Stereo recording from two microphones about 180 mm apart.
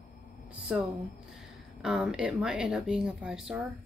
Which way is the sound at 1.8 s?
5° right (ahead or behind).